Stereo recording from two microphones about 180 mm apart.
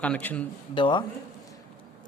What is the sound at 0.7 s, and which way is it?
Speech, 25° left (ahead or behind).